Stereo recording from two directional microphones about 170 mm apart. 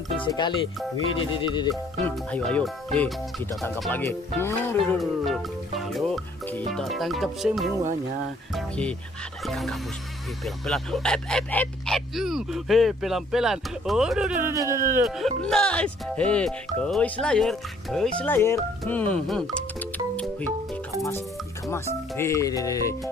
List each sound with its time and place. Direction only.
0.2 s speech: 25° left (ahead or behind)
2.0 s speech: 10° left (ahead or behind)
4.9 s speech: centre (ahead or behind)
14.5 s speech: 20° right (ahead or behind)
15.4 s speech: 5° left (ahead or behind)
22.1 s speech: 15° left (ahead or behind)